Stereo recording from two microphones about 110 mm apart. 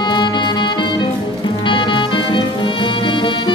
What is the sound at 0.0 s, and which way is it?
Music, 45° left (ahead or behind).